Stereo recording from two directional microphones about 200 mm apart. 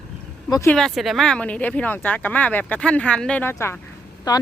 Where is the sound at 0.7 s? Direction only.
Centre (ahead or behind).